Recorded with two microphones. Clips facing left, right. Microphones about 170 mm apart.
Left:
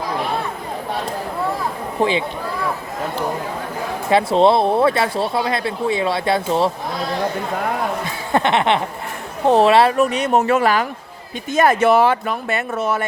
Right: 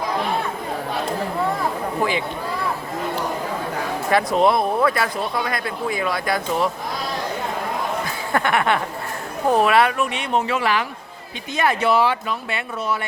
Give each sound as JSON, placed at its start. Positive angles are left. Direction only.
{"t": 2.0, "sound": "speech", "side_deg": 25}
{"t": 4.1, "sound": "speech", "side_deg": 30}
{"t": 8.3, "sound": "a sound", "side_deg": 25}
{"t": 9.5, "sound": "speech", "side_deg": 30}